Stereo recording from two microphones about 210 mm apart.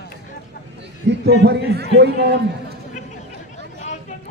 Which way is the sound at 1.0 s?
55° right (ahead or behind).